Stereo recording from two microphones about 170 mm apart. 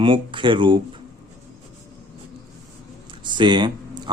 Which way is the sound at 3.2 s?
25° right (ahead or behind).